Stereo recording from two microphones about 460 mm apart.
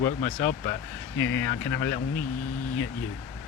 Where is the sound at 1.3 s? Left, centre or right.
Centre.